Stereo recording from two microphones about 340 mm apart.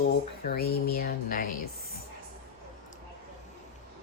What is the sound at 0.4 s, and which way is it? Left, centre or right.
Speech, left.